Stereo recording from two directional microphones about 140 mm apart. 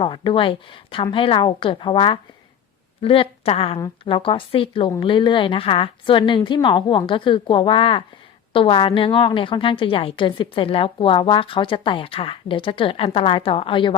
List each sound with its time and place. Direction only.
0.0 s a woman's voice: 35° left (ahead or behind)